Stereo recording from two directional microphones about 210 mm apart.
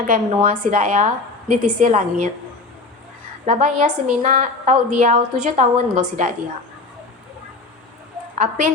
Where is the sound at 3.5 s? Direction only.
35° right (ahead or behind).